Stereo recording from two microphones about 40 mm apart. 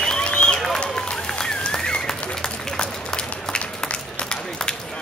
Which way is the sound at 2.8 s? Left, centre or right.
Left.